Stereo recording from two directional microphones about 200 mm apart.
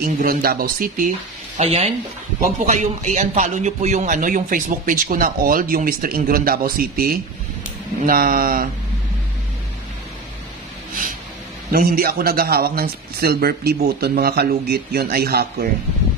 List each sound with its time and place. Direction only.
0.0 s speech: 45° right (ahead or behind)
1.6 s speech: 30° right (ahead or behind)
11.7 s speech: 45° right (ahead or behind)